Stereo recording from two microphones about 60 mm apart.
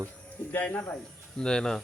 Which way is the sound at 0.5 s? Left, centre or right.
Left.